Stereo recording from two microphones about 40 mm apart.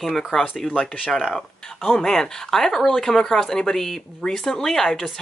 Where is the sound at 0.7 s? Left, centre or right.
Left.